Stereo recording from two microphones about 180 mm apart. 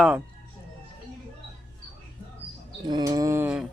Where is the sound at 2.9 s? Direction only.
20° right (ahead or behind).